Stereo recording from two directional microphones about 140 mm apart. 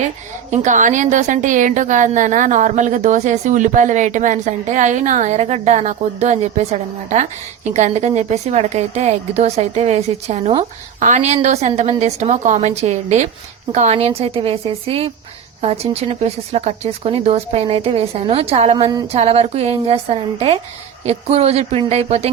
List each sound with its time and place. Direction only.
0.5 s a woman's voice: 60° right (ahead or behind)